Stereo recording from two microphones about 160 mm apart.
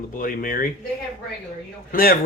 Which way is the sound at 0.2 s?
60° left (ahead or behind).